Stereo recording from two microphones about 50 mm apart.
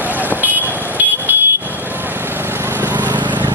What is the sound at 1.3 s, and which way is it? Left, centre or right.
Vehicle, right.